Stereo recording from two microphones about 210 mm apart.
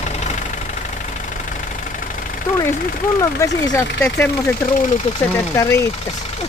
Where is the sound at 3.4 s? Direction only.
10° left (ahead or behind).